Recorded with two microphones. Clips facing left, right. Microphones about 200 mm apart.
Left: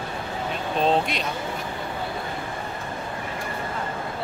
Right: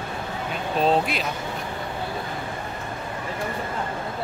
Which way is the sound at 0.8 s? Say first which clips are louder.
Right 1 dB; 5° right (ahead or behind).